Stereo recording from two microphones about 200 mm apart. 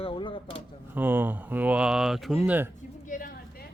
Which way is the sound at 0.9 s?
10° right (ahead or behind).